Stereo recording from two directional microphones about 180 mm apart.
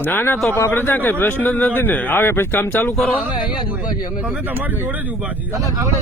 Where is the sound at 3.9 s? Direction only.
20° left (ahead or behind).